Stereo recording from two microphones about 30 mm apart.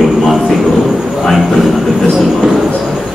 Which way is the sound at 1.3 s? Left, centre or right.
Centre.